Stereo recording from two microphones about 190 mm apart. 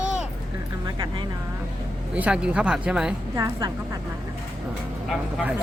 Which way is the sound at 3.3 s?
20° right (ahead or behind).